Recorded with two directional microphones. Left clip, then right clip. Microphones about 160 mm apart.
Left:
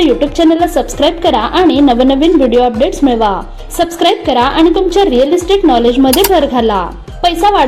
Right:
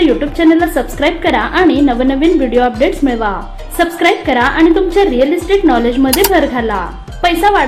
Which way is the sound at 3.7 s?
30° left (ahead or behind).